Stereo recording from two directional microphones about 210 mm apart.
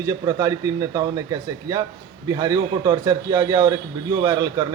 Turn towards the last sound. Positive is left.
turn(degrees=-20)  # may be behind; listen again after turning